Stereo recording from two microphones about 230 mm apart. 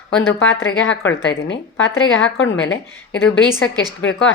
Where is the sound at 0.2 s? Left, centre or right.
Left.